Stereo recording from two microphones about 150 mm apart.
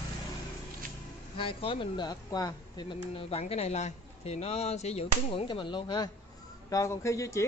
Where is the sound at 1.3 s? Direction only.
40° left (ahead or behind).